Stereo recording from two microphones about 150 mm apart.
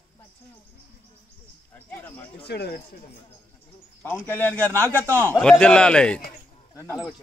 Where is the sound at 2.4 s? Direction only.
90° left.